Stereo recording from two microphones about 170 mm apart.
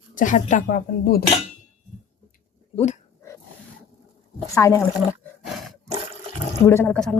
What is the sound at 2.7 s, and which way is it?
Dog, 40° left (ahead or behind).